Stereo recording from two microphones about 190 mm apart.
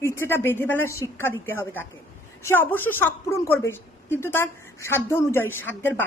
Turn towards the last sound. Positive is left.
turn(degrees=10)  # may be behind; listen again after turning